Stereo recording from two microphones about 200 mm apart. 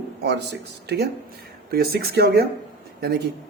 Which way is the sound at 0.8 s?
55° right (ahead or behind).